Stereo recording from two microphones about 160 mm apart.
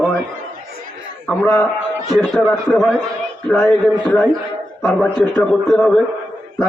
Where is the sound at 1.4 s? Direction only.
15° left (ahead or behind).